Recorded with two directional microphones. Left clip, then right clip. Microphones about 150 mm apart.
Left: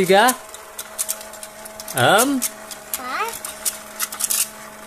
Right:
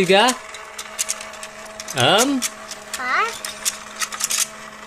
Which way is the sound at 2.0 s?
5° right (ahead or behind).